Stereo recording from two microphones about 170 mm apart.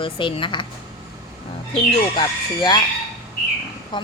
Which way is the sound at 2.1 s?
25° left (ahead or behind).